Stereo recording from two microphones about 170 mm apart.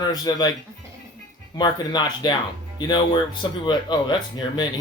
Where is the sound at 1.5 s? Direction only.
25° left (ahead or behind).